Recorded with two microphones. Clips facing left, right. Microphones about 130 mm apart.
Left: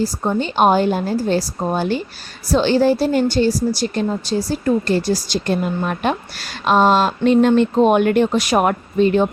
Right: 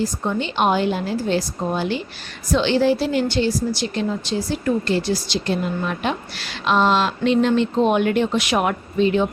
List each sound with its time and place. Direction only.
0.0 s a woman's voice: 40° left (ahead or behind)